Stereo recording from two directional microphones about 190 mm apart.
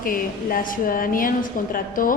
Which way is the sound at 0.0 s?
45° left (ahead or behind).